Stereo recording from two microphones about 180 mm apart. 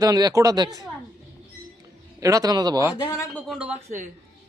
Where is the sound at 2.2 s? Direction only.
20° right (ahead or behind).